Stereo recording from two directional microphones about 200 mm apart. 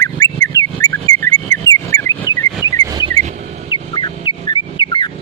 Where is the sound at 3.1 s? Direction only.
35° right (ahead or behind).